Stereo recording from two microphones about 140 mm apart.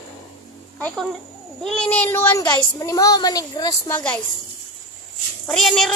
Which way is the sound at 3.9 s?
10° left (ahead or behind).